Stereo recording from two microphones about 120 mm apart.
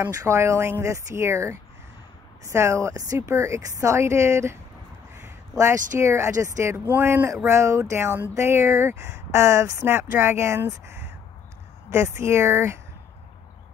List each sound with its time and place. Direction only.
0.1 s speech: 25° right (ahead or behind)
5.9 s speech: 25° right (ahead or behind)